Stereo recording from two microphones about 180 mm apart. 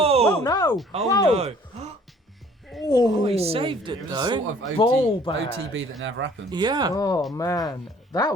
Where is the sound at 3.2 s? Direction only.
35° right (ahead or behind).